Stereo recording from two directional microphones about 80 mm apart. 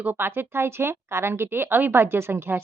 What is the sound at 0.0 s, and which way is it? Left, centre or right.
Speech, right.